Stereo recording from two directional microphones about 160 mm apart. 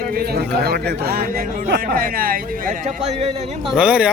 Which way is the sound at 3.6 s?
5° right (ahead or behind).